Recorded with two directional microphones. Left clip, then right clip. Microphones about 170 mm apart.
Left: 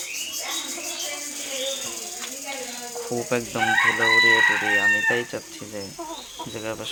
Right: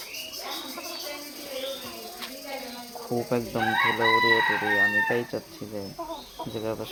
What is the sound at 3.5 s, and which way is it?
Chicken, 10° left (ahead or behind).